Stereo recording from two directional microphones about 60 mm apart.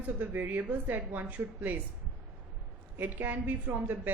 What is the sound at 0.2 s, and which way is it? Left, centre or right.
A woman's voice, right.